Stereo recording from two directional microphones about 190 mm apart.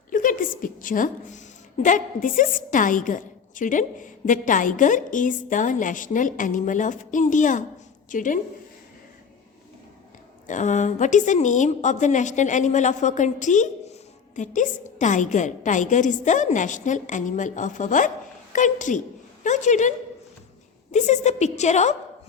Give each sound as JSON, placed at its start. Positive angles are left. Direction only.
{"t": 0.1, "sound": "a woman's voice", "side_deg": 45}
{"t": 10.4, "sound": "a woman's voice", "side_deg": 40}
{"t": 20.9, "sound": "a woman's voice", "side_deg": 35}